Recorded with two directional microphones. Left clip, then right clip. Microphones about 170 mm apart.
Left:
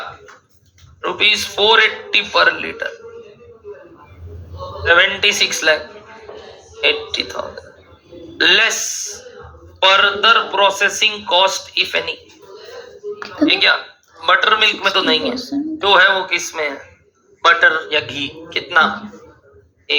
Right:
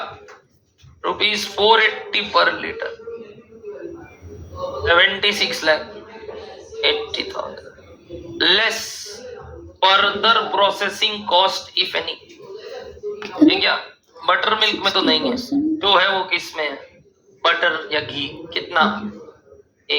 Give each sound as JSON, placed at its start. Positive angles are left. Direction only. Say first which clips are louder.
{"t": 1.0, "sound": "a man's voice", "louder": "left 4 dB", "side_deg": 15}
{"t": 4.8, "sound": "a man's voice", "louder": "left 3 dB", "side_deg": 15}
{"t": 6.8, "sound": "a man's voice", "louder": "left 3 dB", "side_deg": 15}
{"t": 13.2, "sound": "a sound", "louder": "left 2 dB", "side_deg": 10}
{"t": 14.2, "sound": "a man's voice", "louder": "left 4 dB", "side_deg": 15}
{"t": 15.4, "sound": "speech", "louder": "right 1 dB", "side_deg": 0}
{"t": 15.8, "sound": "a man's voice", "louder": "left 5 dB", "side_deg": 15}